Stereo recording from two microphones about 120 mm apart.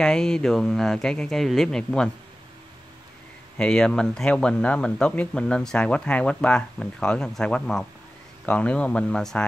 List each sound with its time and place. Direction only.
0.0 s speech: 5° left (ahead or behind)
3.5 s speech: 5° left (ahead or behind)